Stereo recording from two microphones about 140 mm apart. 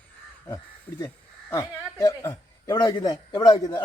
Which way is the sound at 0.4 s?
30° left (ahead or behind).